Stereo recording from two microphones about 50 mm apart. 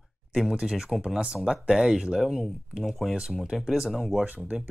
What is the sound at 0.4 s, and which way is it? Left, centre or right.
Speech, centre.